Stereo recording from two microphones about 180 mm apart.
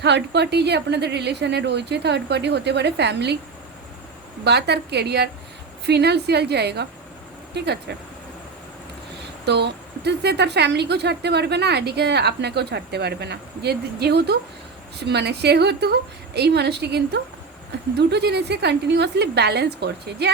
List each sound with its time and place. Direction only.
0.0 s a woman's voice: 70° right (ahead or behind)
4.4 s a woman's voice: 65° right (ahead or behind)
9.5 s a woman's voice: 70° right (ahead or behind)